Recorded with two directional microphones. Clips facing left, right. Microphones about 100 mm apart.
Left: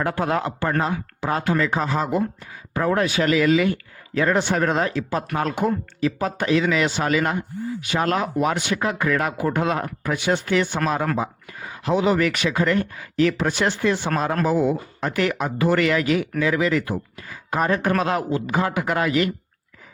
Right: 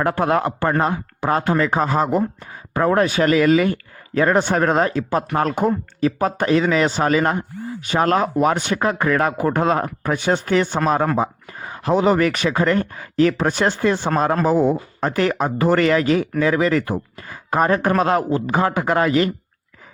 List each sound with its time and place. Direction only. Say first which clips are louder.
0.0 s speech: right 4 dB; 50° right (ahead or behind)